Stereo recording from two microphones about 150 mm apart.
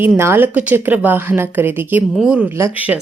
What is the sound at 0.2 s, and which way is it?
A woman's voice, 15° right (ahead or behind).